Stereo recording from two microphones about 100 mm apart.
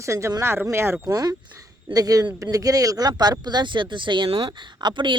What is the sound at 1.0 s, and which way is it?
A woman's voice, 35° right (ahead or behind).